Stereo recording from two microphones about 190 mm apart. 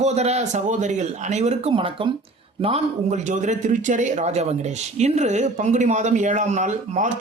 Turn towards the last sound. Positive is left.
turn(degrees=-40)  # may be behind; listen again after turning